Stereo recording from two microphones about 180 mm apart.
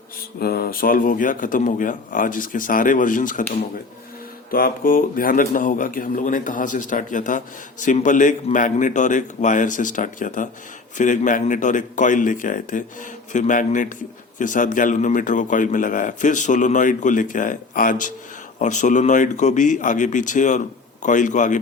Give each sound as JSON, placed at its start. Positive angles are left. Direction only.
{"t": 0.3, "sound": "speech", "side_deg": 60}
{"t": 4.5, "sound": "speech", "side_deg": 50}